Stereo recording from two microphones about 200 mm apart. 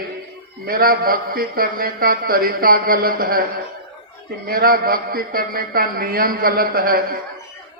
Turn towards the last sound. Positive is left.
turn(degrees=-50)  # may be behind; listen again after turning